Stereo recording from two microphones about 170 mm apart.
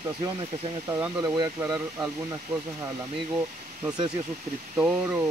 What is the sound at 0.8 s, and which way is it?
Speech, 20° right (ahead or behind).